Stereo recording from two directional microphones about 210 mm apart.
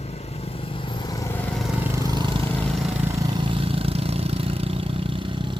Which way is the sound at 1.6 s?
10° right (ahead or behind).